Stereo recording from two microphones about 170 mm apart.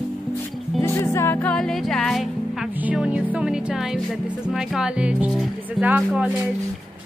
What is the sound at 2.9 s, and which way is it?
Speech, 5° right (ahead or behind).